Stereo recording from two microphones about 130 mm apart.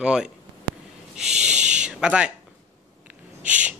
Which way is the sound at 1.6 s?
65° right (ahead or behind).